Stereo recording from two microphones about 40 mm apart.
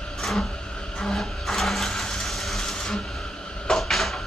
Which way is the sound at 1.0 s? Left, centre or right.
Centre.